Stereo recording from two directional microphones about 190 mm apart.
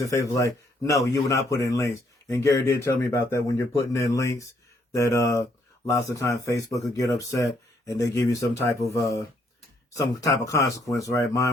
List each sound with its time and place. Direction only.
0.1 s speech: 15° left (ahead or behind)